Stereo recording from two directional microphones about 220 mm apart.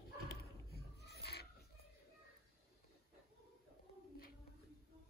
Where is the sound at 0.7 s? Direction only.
45° left (ahead or behind).